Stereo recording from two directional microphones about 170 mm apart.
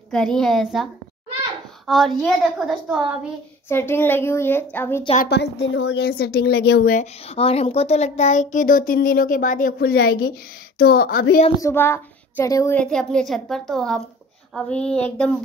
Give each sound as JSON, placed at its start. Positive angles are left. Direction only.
{"t": 0.1, "sound": "a woman's voice", "side_deg": 5}
{"t": 1.9, "sound": "a woman's voice", "side_deg": 0}
{"t": 3.6, "sound": "a child's voice", "side_deg": 15}
{"t": 5.3, "sound": "speech", "side_deg": 85}
{"t": 7.0, "sound": "a child's voice", "side_deg": 35}
{"t": 11.6, "sound": "a woman's voice", "side_deg": 15}
{"t": 12.7, "sound": "a woman's voice", "side_deg": 5}